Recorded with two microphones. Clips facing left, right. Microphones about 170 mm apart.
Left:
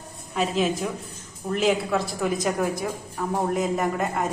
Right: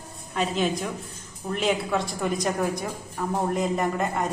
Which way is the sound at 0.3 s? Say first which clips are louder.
Left 2 dB; centre (ahead or behind).